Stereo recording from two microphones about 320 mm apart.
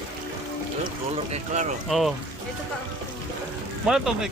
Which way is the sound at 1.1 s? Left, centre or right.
Centre.